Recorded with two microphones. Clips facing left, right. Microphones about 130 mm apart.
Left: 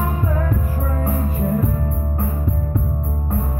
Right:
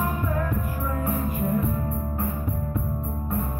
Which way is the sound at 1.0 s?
40° left (ahead or behind).